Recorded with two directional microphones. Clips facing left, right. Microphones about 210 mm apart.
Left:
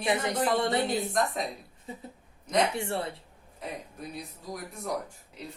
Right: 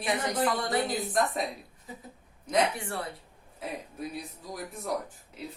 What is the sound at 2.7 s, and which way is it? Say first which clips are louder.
Speech: left 4 dB; 25° left (ahead or behind).